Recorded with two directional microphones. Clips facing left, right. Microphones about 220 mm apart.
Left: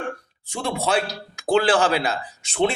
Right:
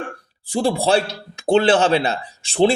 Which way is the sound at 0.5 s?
30° right (ahead or behind).